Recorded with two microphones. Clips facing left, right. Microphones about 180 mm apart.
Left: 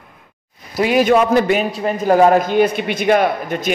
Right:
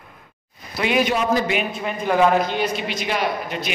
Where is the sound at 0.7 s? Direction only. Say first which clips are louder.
Left 7 dB; 40° left (ahead or behind).